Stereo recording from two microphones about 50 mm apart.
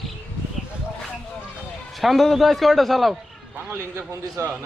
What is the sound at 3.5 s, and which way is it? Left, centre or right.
Speech, right.